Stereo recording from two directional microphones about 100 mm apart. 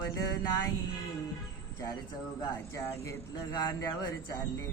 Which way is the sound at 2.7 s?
30° left (ahead or behind).